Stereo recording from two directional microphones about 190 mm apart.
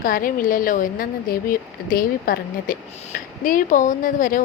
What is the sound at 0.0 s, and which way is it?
Speech, 45° left (ahead or behind).